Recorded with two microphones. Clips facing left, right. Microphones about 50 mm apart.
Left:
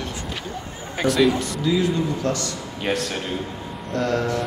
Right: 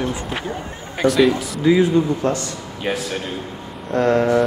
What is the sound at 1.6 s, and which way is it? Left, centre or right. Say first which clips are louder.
Speech: right 7 dB; right.